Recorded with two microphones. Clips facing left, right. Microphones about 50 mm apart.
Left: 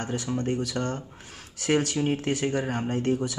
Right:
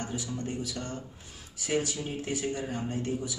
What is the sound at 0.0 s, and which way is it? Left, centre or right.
Speech, left.